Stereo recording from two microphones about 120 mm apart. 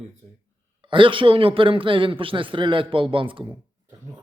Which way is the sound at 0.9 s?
45° right (ahead or behind).